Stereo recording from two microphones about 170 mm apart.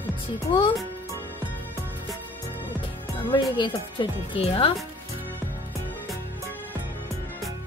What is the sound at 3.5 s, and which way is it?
Speech, 30° left (ahead or behind).